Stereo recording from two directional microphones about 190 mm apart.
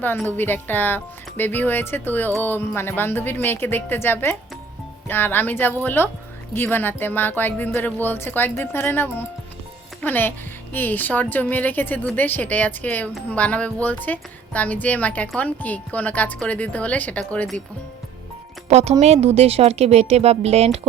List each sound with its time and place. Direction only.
0.2 s speech: 10° left (ahead or behind)
18.7 s speech: 35° right (ahead or behind)